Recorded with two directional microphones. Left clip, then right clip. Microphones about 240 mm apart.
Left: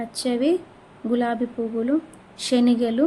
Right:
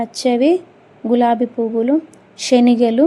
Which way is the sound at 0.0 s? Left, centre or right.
Right.